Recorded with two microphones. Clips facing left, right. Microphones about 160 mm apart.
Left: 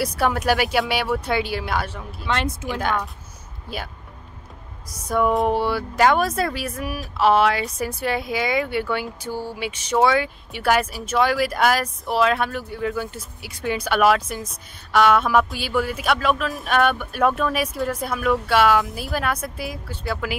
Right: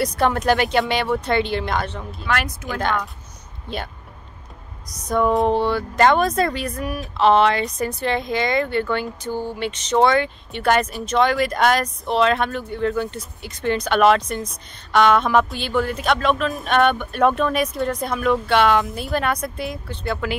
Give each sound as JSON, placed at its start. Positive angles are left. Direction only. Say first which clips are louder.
{"t": 0.0, "sound": "speech", "louder": "right 2 dB", "side_deg": 5}
{"t": 2.2, "sound": "speech", "louder": "even", "side_deg": 25}
{"t": 2.6, "sound": "speech", "louder": "right 1 dB", "side_deg": 5}
{"t": 5.0, "sound": "speech", "louder": "right 1 dB", "side_deg": 10}